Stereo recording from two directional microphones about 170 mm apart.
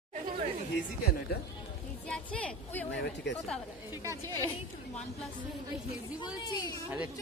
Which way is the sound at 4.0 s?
20° right (ahead or behind).